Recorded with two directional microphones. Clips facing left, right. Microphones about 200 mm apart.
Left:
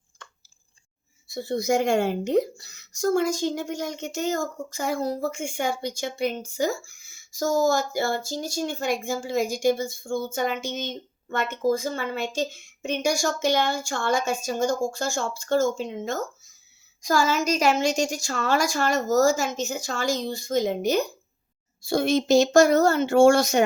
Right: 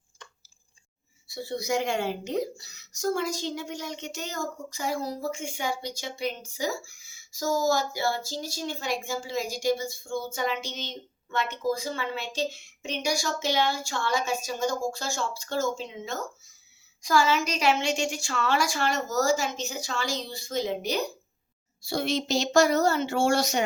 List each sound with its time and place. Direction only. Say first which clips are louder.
1.3 s speech: left 5 dB; 50° left (ahead or behind)